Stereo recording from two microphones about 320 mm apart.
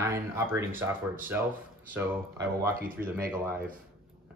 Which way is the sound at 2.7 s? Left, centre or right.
Right.